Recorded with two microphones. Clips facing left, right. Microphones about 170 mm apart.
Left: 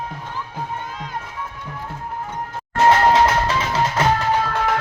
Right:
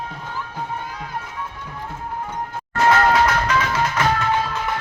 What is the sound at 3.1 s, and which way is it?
Music, 25° left (ahead or behind).